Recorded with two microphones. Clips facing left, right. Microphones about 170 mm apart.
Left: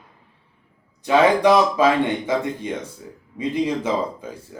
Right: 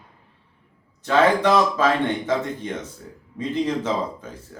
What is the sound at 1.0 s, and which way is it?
Speech, 10° left (ahead or behind).